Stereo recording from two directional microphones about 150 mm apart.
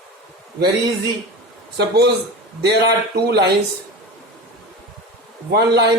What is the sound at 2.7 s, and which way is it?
Speech, 90° right.